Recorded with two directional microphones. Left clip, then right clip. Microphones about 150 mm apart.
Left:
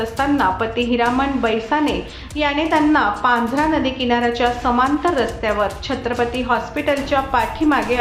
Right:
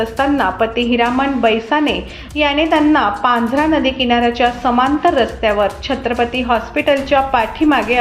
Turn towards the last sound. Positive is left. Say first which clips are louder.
# right 3 dB
turn(degrees=-20)  # may be behind; listen again after turning